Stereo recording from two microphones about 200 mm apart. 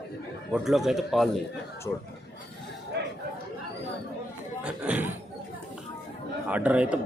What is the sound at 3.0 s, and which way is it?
Chatter, 60° right (ahead or behind).